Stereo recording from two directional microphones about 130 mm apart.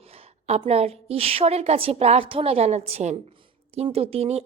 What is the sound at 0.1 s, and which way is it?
A woman's voice, 55° right (ahead or behind).